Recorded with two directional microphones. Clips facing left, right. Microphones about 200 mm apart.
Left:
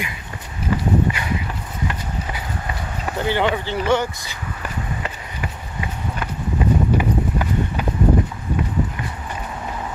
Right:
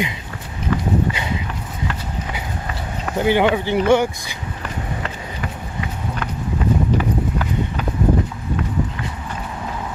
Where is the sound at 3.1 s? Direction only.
15° right (ahead or behind).